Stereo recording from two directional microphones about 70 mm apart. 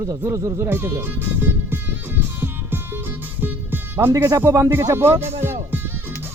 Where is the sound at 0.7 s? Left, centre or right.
Right.